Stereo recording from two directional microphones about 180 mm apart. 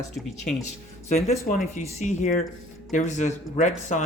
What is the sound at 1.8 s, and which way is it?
Speech, 40° left (ahead or behind).